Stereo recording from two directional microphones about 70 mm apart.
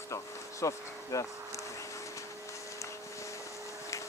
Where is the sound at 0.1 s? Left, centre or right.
Left.